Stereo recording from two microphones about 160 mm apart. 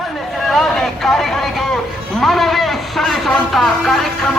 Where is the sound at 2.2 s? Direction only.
Centre (ahead or behind).